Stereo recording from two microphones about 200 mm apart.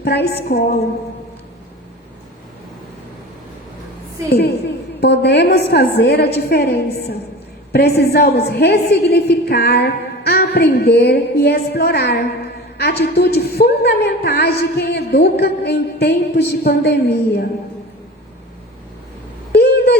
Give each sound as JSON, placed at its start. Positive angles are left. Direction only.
{"t": 0.0, "sound": "a woman's voice", "side_deg": 55}
{"t": 4.3, "sound": "a woman's voice", "side_deg": 55}
{"t": 19.5, "sound": "a sound", "side_deg": 55}